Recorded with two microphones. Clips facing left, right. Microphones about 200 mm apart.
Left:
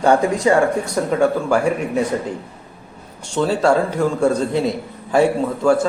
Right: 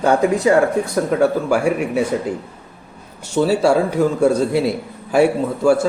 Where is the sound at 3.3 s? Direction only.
5° right (ahead or behind).